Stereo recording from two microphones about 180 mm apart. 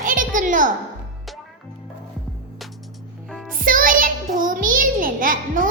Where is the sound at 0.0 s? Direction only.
50° right (ahead or behind).